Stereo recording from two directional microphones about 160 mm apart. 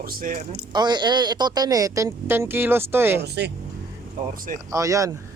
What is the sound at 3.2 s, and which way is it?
Speech, 90° right.